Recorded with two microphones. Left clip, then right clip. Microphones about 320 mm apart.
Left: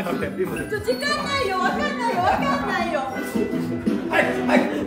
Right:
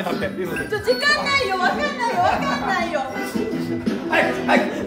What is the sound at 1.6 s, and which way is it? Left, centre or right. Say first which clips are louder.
Speech: right 2 dB; centre.